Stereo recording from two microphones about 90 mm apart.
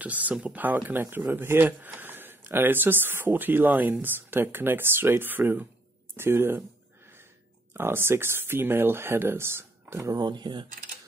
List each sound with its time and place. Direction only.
0.0 s speech: 15° right (ahead or behind)
7.7 s speech: 25° right (ahead or behind)
10.1 s speech: 55° right (ahead or behind)